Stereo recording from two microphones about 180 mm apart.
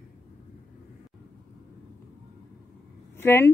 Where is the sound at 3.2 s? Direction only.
15° left (ahead or behind).